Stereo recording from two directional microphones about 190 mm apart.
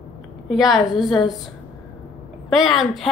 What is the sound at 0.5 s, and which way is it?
Speech, centre (ahead or behind).